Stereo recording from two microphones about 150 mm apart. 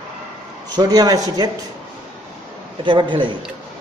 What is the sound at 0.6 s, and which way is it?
Speech, 25° right (ahead or behind).